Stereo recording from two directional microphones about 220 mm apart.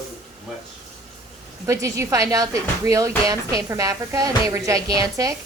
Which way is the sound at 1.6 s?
15° right (ahead or behind).